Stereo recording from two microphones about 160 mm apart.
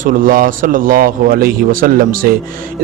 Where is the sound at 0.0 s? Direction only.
60° right (ahead or behind).